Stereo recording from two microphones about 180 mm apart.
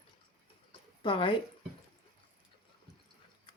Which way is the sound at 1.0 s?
25° left (ahead or behind).